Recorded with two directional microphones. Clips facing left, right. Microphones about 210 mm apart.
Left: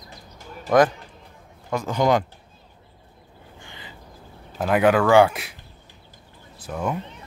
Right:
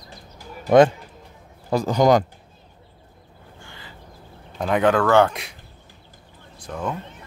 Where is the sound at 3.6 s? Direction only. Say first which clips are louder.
Even; 20° left (ahead or behind).